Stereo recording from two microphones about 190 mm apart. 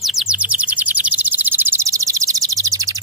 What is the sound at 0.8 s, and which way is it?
Bird, 10° right (ahead or behind).